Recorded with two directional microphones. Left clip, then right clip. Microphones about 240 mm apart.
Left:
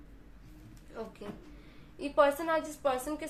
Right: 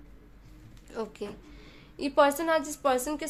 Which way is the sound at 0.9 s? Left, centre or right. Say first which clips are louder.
Right 7 dB; right.